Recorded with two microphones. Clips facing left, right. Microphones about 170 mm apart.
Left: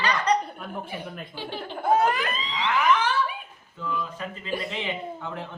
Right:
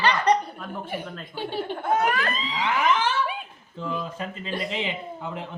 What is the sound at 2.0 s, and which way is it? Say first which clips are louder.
Speech: left 1 dB; 25° left (ahead or behind).